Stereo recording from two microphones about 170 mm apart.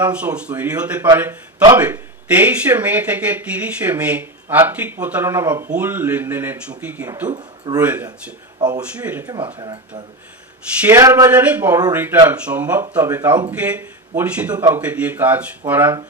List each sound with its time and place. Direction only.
0.0 s speech: 5° right (ahead or behind)
7.3 s a man's voice: 25° right (ahead or behind)
7.8 s speech: 10° right (ahead or behind)
8.5 s speech: 25° right (ahead or behind)
9.0 s speech: 10° right (ahead or behind)
9.6 s speech: 25° right (ahead or behind)
10.8 s speech: 15° right (ahead or behind)